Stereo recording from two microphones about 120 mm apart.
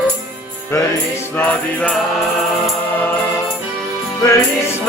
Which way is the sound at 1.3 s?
10° left (ahead or behind).